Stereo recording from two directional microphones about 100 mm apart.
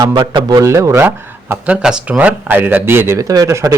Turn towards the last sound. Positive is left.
turn(degrees=-35)  # may be behind; listen again after turning